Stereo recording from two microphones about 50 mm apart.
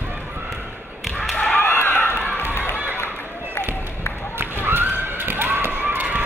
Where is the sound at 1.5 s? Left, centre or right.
Left.